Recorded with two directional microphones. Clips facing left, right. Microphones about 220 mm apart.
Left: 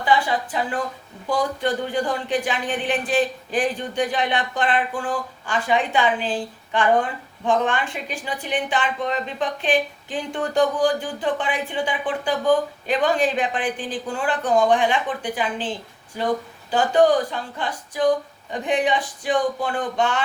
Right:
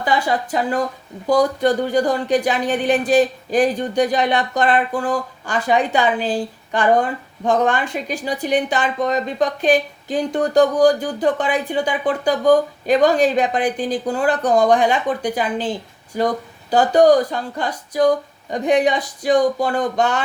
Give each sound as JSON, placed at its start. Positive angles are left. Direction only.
{"t": 0.0, "sound": "speech", "side_deg": -40}
{"t": 16.7, "sound": "speech", "side_deg": -40}